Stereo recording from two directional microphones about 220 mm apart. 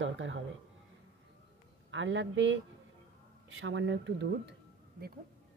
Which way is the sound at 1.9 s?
60° right (ahead or behind).